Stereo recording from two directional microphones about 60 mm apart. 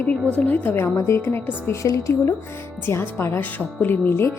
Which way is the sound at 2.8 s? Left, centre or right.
Left.